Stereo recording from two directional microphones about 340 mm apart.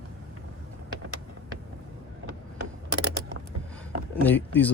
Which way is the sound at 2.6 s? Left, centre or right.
Right.